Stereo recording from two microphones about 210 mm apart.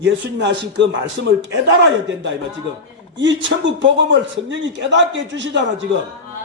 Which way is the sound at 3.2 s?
60° right (ahead or behind).